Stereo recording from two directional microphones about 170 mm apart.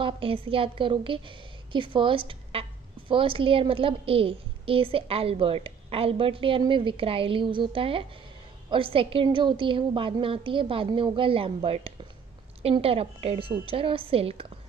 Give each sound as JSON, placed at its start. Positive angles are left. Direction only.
{"t": 0.0, "sound": "a woman's voice", "side_deg": -30}